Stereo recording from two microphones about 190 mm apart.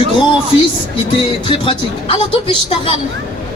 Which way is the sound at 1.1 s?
30° left (ahead or behind).